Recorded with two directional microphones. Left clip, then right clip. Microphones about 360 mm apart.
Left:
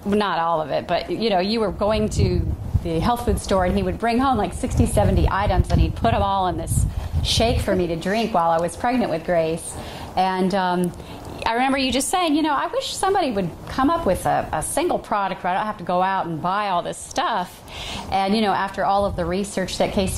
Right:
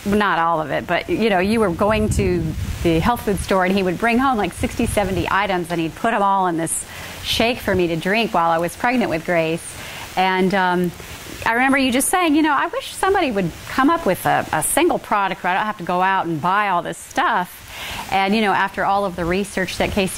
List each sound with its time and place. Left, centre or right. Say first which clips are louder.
0.1 s a woman's voice: right 3 dB; right